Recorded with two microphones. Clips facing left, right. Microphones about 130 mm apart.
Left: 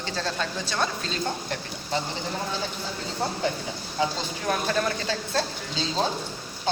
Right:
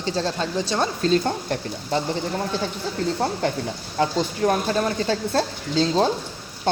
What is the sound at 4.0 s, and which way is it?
Speech, 40° right (ahead or behind).